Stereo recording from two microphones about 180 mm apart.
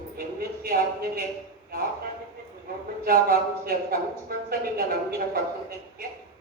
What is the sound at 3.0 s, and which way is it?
A man's voice, 55° right (ahead or behind).